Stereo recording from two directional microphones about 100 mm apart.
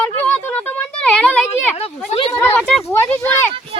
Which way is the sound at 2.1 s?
90° left.